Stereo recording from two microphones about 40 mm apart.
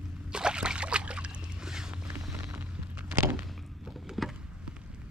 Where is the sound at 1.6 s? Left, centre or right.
Centre.